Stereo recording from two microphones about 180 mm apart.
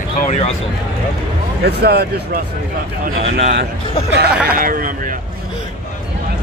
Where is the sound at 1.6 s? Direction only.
65° right (ahead or behind).